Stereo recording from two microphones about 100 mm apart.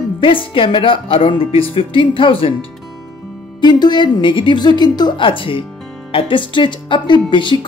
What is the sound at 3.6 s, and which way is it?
Speech, 45° left (ahead or behind).